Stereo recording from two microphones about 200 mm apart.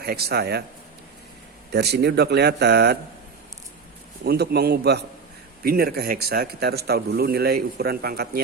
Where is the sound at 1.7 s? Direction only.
55° right (ahead or behind).